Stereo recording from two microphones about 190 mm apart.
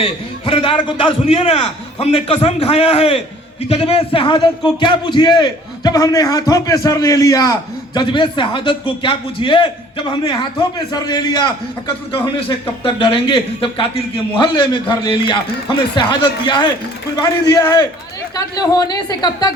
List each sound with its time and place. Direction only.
0.0 s a man's voice: 30° left (ahead or behind)